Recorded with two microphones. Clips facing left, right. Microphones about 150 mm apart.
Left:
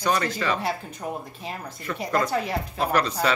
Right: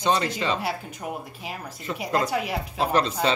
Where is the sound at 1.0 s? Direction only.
10° right (ahead or behind).